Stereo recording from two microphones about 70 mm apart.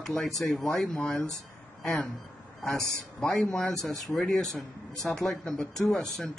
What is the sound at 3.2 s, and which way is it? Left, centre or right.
Speech, centre.